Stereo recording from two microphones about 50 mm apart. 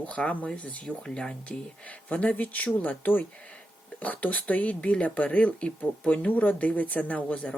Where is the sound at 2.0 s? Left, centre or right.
Left.